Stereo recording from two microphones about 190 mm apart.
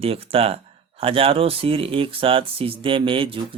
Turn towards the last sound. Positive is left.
turn(degrees=-30)  # may be behind; listen again after turning